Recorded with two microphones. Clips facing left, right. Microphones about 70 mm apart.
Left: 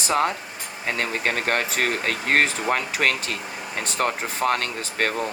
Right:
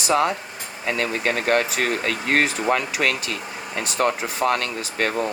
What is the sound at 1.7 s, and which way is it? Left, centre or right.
Speech, left.